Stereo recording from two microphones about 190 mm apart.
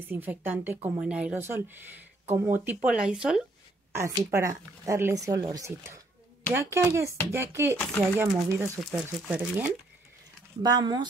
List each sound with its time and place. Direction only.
0.0 s speech: 10° right (ahead or behind)
3.9 s speech: 15° right (ahead or behind)
10.6 s speech: 20° right (ahead or behind)